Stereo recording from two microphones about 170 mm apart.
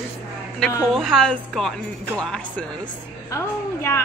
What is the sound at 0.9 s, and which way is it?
Speech, centre (ahead or behind).